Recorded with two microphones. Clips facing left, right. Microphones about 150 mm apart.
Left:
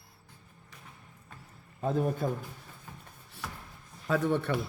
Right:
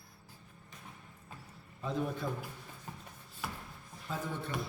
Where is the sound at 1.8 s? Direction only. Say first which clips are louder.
Left 6 dB; 45° left (ahead or behind).